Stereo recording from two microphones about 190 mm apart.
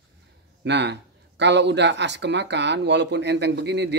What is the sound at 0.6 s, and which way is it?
Speech, 65° right (ahead or behind).